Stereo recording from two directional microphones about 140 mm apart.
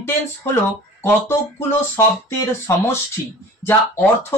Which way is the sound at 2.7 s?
20° left (ahead or behind).